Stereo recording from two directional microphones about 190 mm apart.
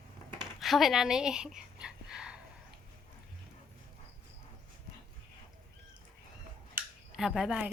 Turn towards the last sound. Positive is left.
turn(degrees=-5)  # may be behind; listen again after turning